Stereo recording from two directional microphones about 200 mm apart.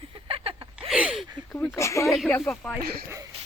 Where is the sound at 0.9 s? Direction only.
5° right (ahead or behind).